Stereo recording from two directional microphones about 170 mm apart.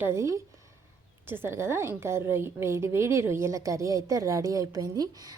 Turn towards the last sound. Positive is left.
turn(degrees=-20)  # may be behind; listen again after turning